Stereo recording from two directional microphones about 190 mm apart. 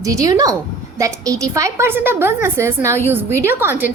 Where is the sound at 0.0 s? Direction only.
15° right (ahead or behind).